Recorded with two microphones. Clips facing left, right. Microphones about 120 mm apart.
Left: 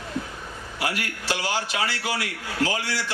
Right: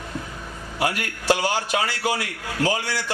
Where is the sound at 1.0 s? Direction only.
45° right (ahead or behind).